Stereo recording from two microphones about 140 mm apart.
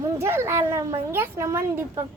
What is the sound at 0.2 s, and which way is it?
A child's voice, 15° right (ahead or behind).